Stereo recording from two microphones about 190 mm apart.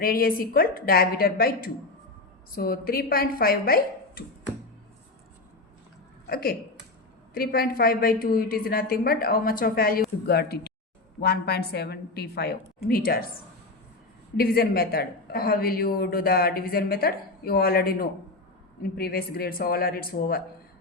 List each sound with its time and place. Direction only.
0.0 s a woman's voice: 50° left (ahead or behind)
6.2 s a woman's voice: 50° left (ahead or behind)
14.3 s a woman's voice: 55° left (ahead or behind)